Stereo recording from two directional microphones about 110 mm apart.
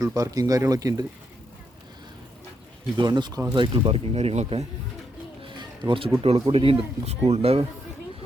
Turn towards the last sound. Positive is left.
turn(degrees=-65)  # may be behind; listen again after turning